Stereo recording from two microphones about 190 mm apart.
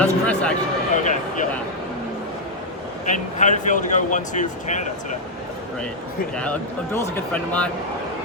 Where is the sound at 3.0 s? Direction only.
40° left (ahead or behind).